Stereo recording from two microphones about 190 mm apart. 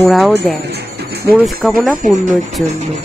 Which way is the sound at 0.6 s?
55° right (ahead or behind).